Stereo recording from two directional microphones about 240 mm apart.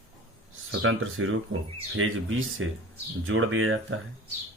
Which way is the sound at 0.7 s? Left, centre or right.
Right.